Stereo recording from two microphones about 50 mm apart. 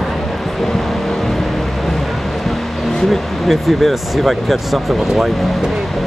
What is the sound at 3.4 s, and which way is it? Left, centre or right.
Speech, centre.